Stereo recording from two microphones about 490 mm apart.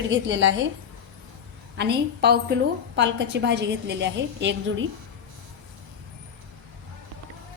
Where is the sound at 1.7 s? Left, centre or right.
Centre.